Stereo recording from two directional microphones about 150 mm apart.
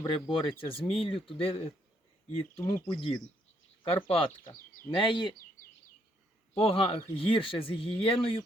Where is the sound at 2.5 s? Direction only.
10° left (ahead or behind).